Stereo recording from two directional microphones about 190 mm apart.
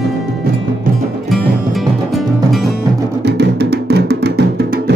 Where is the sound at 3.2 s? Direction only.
60° right (ahead or behind).